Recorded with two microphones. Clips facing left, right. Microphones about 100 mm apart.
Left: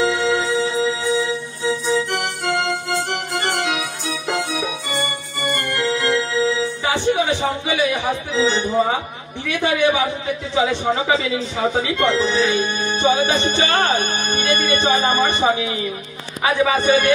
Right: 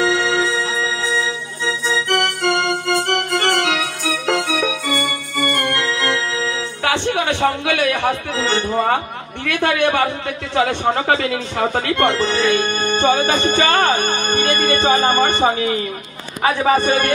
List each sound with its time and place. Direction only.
0.0 s music: 65° right (ahead or behind)
1.6 s organ: 65° right (ahead or behind); by 15.8 s 45° right (ahead or behind)
16.4 s a man's voice: 40° right (ahead or behind)